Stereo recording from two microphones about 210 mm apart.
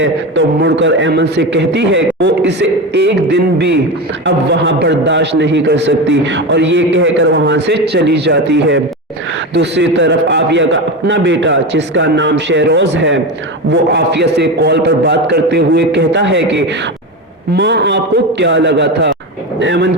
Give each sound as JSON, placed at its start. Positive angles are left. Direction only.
{"t": 0.0, "sound": "a man's voice", "side_deg": -60}